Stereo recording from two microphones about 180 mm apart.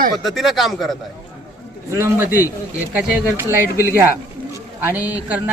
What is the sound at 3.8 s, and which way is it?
A man's voice, 10° right (ahead or behind).